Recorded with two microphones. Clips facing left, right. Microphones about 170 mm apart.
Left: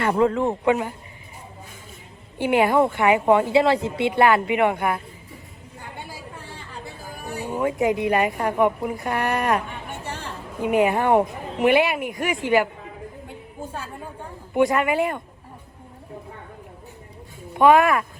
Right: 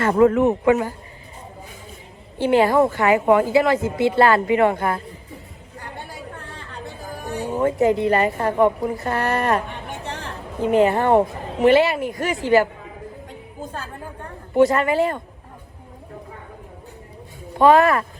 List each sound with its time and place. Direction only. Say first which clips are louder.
0.0 s speech: right 4 dB; 20° left (ahead or behind)
2.4 s speech: right 2 dB; 15° left (ahead or behind)
6.0 s chatter: right 2 dB; centre (ahead or behind)
7.5 s speech: right 3 dB; centre (ahead or behind)
7.8 s speech: right 3 dB; 15° left (ahead or behind)
9.6 s a sound: right 2 dB; centre (ahead or behind)
10.6 s speech: right 3 dB; 15° left (ahead or behind)
14.2 s a woman's voice: right 4 dB; 5° left (ahead or behind)
17.5 s speech: right 1 dB; 15° left (ahead or behind)